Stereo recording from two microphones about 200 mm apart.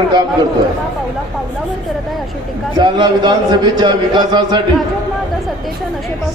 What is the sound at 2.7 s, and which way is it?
A man's voice, 20° right (ahead or behind).